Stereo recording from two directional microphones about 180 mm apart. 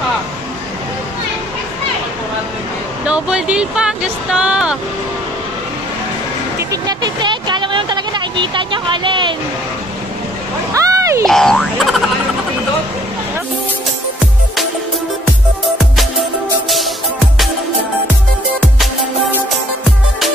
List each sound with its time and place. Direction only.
3.1 s speech: 5° right (ahead or behind)
6.7 s vehicle: 20° right (ahead or behind)
10.7 s a sound: 20° right (ahead or behind)
11.2 s boing: centre (ahead or behind)